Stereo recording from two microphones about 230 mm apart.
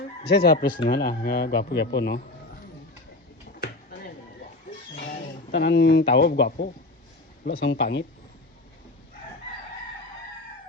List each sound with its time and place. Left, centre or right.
0.3 s speech: left
3.6 s a sound: left
4.9 s speech: left